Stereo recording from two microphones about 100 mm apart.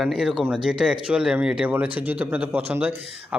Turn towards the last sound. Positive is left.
turn(degrees=-15)  # may be behind; listen again after turning